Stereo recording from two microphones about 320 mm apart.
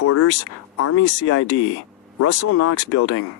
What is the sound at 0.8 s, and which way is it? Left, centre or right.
Speech, left.